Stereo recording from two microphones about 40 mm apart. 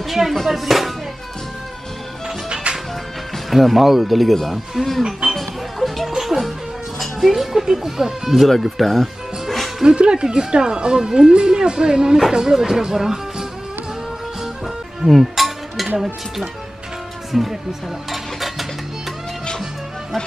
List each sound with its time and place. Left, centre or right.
0.0 s music: centre
0.5 s speech: centre
2.2 s music: centre
3.4 s speech: centre
5.3 s music: centre
7.0 s a sound: centre
7.6 s speech: centre
9.8 s speech: right
15.0 s music: centre
17.3 s speech: centre
18.1 s stir: centre